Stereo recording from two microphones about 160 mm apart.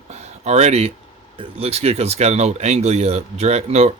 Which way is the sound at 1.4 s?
40° right (ahead or behind).